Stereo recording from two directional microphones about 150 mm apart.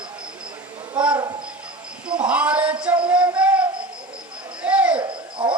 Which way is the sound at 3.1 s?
10° right (ahead or behind).